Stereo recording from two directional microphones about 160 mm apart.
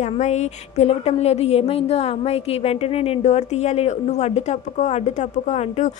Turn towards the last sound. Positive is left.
turn(degrees=45)  # may be behind; listen again after turning